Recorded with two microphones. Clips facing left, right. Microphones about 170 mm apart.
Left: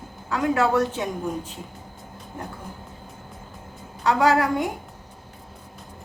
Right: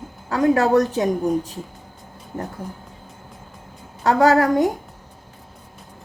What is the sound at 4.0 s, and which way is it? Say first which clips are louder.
Speech: right 4 dB; 45° right (ahead or behind).